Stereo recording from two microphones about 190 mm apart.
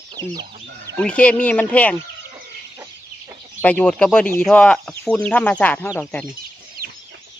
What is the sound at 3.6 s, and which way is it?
Speech, 5° left (ahead or behind).